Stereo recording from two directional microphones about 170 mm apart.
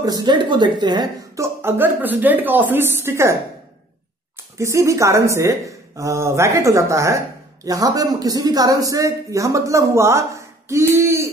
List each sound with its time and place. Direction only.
0.0 s a woman's voice: 25° right (ahead or behind)
4.6 s a woman's voice: 15° right (ahead or behind)